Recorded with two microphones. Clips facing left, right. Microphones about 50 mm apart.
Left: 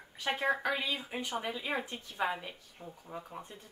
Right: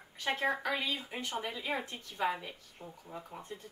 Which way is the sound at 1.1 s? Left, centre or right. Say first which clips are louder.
Left 2 dB; left.